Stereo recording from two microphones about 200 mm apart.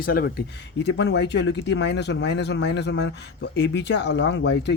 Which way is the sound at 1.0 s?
60° left (ahead or behind).